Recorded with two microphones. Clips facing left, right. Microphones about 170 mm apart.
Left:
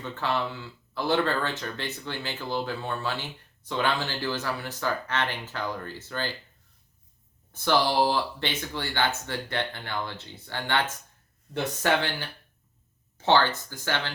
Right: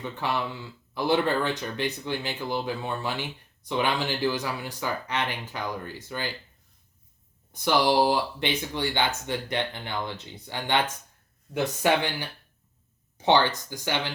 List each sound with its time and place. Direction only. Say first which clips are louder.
0.0 s speech: even; 15° right (ahead or behind)
7.5 s speech: right 2 dB; 15° right (ahead or behind)